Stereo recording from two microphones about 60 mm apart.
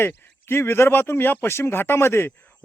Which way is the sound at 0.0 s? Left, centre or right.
Left.